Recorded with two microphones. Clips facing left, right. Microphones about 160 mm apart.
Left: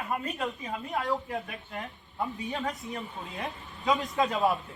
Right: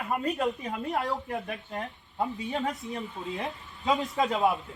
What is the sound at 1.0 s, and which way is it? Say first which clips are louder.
Speech: even; 40° right (ahead or behind).